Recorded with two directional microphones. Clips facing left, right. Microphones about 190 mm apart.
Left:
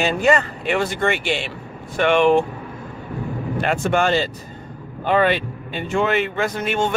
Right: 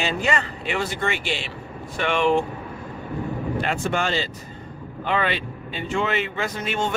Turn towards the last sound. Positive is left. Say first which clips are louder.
# left 4 dB
turn(degrees=55)  # may be behind; listen again after turning